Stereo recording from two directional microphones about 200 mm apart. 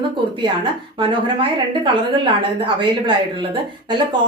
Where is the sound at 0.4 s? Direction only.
25° right (ahead or behind).